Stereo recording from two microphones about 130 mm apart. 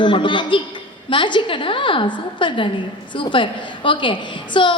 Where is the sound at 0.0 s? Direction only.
40° left (ahead or behind).